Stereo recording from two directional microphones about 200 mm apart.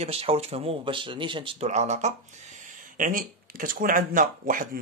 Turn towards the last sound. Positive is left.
turn(degrees=-40)  # may be behind; listen again after turning